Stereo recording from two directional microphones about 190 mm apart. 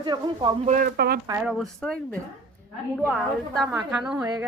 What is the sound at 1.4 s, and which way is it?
Speech, centre (ahead or behind).